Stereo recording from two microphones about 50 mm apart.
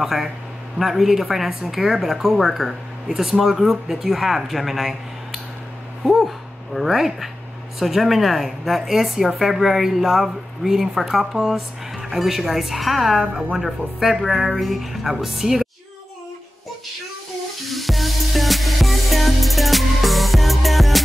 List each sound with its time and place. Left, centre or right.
0.0 s a woman's voice: centre
13.2 s speech: centre
13.5 s a woman's voice: centre
17.6 s music: centre